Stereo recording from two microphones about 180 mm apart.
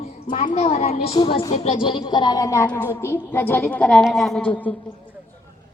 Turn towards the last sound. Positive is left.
turn(degrees=10)  # may be behind; listen again after turning